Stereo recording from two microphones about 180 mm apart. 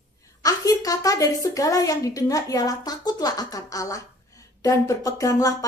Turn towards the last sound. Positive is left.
turn(degrees=20)  # may be behind; listen again after turning